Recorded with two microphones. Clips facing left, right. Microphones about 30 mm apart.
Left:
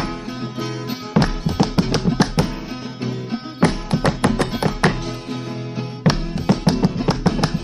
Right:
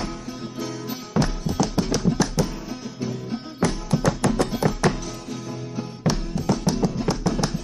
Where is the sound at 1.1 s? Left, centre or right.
Left.